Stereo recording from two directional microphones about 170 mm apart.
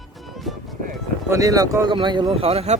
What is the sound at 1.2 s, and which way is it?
Speech, 20° right (ahead or behind).